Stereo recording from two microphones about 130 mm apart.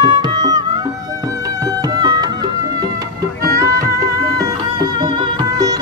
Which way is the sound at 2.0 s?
35° right (ahead or behind).